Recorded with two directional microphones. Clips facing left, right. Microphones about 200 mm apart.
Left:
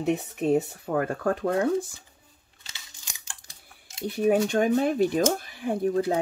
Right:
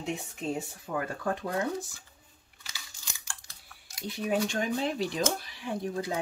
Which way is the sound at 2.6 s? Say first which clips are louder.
Right 1 dB; 20° left (ahead or behind).